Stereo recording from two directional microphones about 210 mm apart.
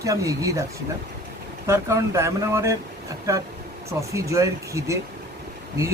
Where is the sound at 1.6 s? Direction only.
15° right (ahead or behind).